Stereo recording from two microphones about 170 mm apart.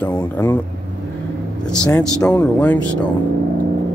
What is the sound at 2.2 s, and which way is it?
Speech, 10° left (ahead or behind).